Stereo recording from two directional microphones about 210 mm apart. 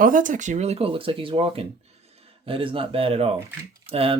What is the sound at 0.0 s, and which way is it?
Speech, 40° right (ahead or behind).